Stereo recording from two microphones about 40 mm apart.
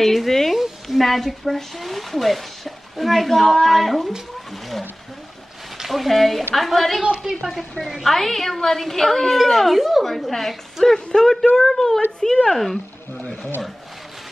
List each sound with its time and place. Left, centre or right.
0.0 s speech: centre
5.9 s a woman's voice: centre
13.2 s speech: left